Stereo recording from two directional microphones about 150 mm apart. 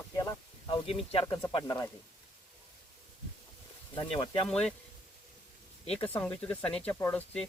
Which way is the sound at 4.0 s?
35° left (ahead or behind).